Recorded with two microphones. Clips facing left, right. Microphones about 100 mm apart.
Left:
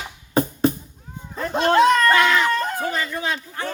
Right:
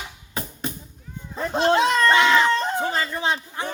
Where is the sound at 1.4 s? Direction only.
25° right (ahead or behind).